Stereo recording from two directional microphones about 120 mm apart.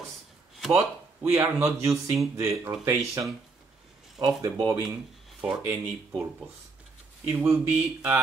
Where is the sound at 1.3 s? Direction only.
25° right (ahead or behind).